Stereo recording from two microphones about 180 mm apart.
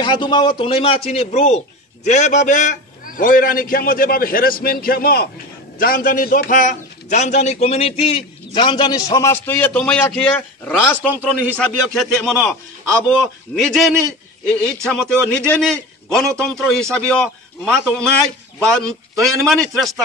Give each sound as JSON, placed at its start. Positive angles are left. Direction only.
{"t": 0.0, "sound": "a man's voice", "side_deg": 25}